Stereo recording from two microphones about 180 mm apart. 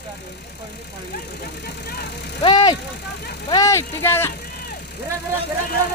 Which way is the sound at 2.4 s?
25° left (ahead or behind).